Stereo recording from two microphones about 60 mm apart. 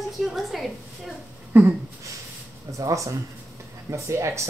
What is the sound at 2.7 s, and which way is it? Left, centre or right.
Speech, right.